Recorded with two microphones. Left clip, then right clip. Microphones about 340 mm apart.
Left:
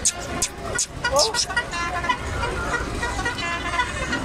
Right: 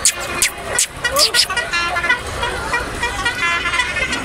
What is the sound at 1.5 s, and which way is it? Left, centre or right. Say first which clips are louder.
Speech: right 6 dB; left.